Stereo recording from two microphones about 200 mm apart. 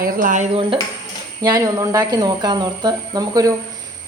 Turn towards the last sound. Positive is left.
turn(degrees=-20)  # may be behind; listen again after turning